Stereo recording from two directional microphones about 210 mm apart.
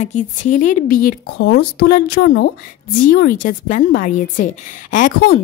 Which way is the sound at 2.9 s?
40° left (ahead or behind).